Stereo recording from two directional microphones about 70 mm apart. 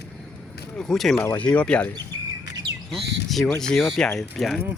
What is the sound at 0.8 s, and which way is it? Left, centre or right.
Speech, centre.